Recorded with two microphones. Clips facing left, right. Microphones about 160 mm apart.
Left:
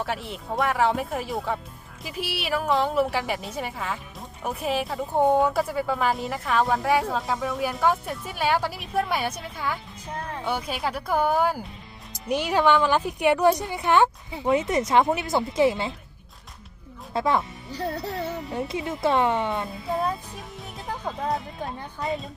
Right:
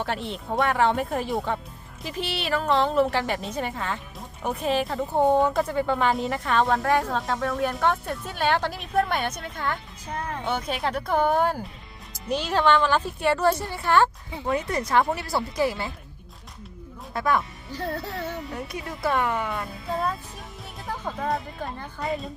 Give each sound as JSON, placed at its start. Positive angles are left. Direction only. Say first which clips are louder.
{"t": 0.0, "sound": "a woman's voice", "louder": "right 1 dB", "side_deg": 5}
{"t": 17.2, "sound": "a woman's voice", "louder": "left 1 dB", "side_deg": 25}
{"t": 18.3, "sound": "a woman's voice", "louder": "left 1 dB", "side_deg": 0}
{"t": 18.5, "sound": "speech", "louder": "left 5 dB", "side_deg": 25}
{"t": 20.8, "sound": "a woman's voice", "louder": "even", "side_deg": 0}